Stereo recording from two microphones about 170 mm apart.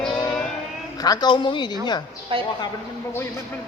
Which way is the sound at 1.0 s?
25° left (ahead or behind).